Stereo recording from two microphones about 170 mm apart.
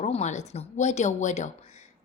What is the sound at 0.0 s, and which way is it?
A woman's voice, 40° left (ahead or behind).